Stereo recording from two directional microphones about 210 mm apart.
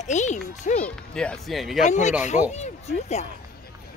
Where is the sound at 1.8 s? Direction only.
35° left (ahead or behind).